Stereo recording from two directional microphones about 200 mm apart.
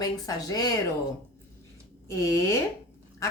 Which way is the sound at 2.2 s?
15° left (ahead or behind).